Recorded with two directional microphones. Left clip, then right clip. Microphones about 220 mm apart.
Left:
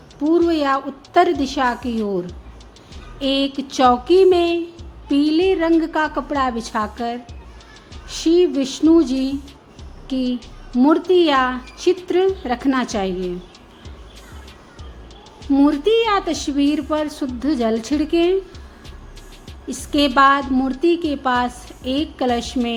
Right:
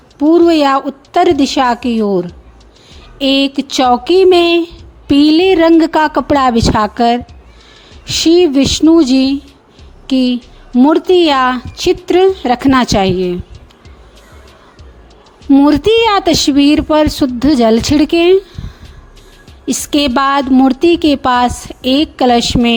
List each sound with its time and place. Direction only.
0.2 s a woman's voice: 35° right (ahead or behind)
15.4 s a woman's voice: 40° right (ahead or behind)
19.6 s a woman's voice: 45° right (ahead or behind)